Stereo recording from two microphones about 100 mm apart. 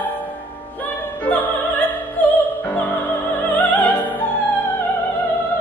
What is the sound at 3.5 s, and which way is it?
Music, 15° left (ahead or behind).